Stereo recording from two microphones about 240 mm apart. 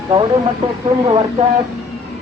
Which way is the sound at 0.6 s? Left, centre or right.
Right.